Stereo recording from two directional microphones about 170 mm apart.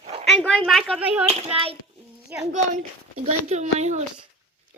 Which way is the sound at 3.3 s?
40° right (ahead or behind).